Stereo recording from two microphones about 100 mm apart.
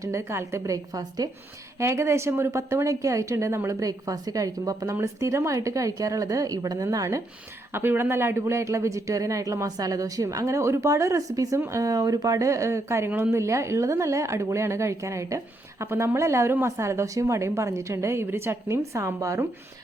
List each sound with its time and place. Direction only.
0.0 s speech: 30° right (ahead or behind)
1.8 s speech: 30° right (ahead or behind)
7.7 s speech: 25° right (ahead or behind)
13.1 s speech: 15° right (ahead or behind)
13.3 s a woman's voice: 30° right (ahead or behind)